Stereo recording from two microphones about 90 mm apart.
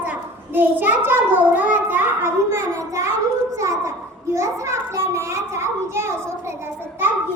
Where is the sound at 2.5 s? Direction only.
35° right (ahead or behind).